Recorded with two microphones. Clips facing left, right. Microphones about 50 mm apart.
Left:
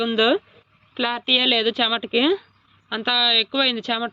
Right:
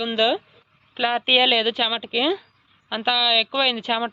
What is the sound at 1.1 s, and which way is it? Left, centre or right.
Speech, right.